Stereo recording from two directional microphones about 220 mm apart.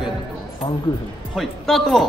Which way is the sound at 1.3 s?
Centre (ahead or behind).